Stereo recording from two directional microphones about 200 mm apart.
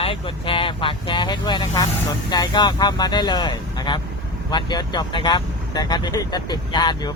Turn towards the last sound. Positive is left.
turn(degrees=20)  # may be behind; listen again after turning